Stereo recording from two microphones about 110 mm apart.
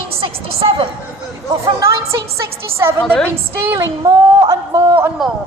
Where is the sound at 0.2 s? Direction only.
55° right (ahead or behind).